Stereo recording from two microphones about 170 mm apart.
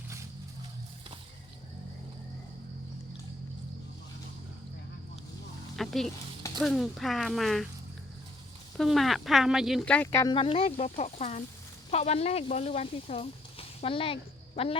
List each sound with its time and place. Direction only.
5.7 s speech: centre (ahead or behind)
8.8 s speech: centre (ahead or behind); by 10.3 s 15° left (ahead or behind)
10.3 s speech: 35° left (ahead or behind)